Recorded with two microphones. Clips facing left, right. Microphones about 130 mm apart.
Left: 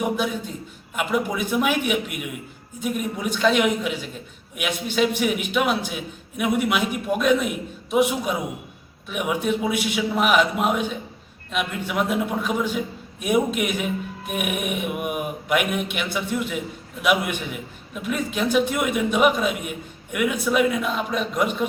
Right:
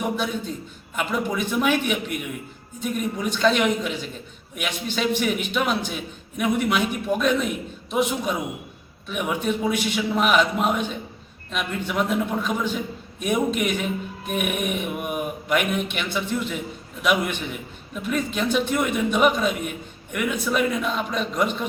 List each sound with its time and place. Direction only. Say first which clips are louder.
0.9 s a man's voice: left 1 dB; 10° left (ahead or behind)